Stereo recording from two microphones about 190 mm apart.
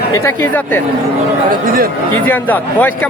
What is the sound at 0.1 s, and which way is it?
Speech, 10° left (ahead or behind).